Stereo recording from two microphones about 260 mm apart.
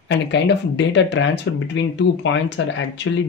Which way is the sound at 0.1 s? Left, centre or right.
Left.